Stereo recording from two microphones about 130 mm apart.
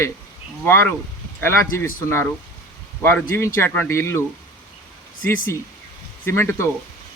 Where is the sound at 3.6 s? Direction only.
15° left (ahead or behind).